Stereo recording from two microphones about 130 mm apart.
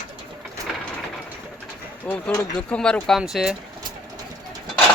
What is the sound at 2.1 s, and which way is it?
Speech, 10° left (ahead or behind).